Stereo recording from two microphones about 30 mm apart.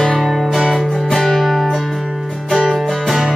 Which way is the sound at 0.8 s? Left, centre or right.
Centre.